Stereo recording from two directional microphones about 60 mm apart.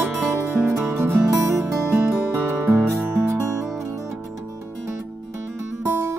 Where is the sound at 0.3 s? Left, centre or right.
Right.